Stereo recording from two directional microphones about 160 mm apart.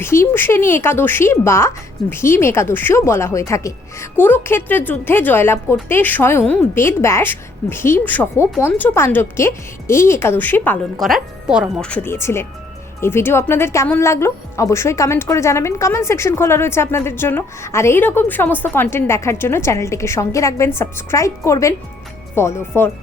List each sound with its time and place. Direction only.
0.0 s speech: 15° left (ahead or behind)
11.0 s speech: 5° right (ahead or behind)
11.9 s speech: 15° left (ahead or behind)